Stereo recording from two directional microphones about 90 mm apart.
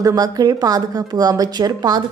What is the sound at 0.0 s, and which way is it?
Speech, 40° right (ahead or behind).